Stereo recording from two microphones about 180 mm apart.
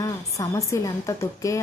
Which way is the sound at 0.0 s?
15° left (ahead or behind).